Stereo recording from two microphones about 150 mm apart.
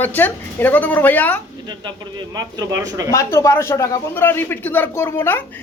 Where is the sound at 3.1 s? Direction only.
20° left (ahead or behind).